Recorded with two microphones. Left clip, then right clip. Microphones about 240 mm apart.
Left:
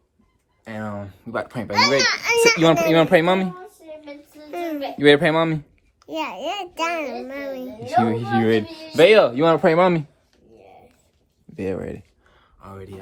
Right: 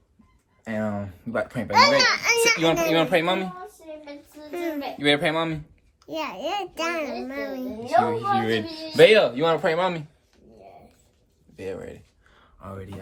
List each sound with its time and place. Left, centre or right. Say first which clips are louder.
0.6 s speech: right 2 dB; centre
1.7 s a child's voice: right 1 dB; centre
2.0 s a child's voice: left 1 dB; centre
2.9 s a woman's voice: left 5 dB; left
4.5 s a child's voice: left 2 dB; centre
4.9 s a child's voice: left 7 dB; left
6.1 s a child's voice: left 2 dB; centre
7.8 s a woman's voice: left 1 dB; left
9.0 s speech: left 2 dB; left
9.3 s a woman's voice: left 5 dB; left
11.5 s a woman's voice: left 6 dB; left
12.4 s a sound: even; centre